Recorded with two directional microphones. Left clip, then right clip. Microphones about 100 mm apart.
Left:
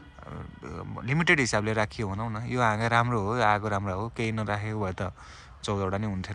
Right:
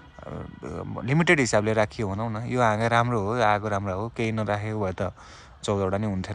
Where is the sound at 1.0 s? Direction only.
35° right (ahead or behind).